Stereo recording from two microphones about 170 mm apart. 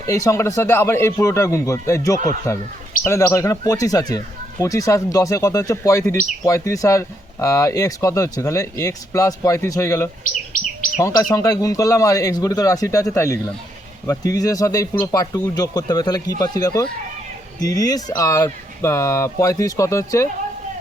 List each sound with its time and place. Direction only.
0.1 s speech: 20° left (ahead or behind)
10.5 s bird: 55° left (ahead or behind)
11.0 s speech: 20° left (ahead or behind)